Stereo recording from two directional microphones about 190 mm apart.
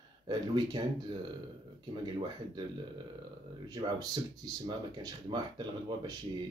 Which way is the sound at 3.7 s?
20° right (ahead or behind).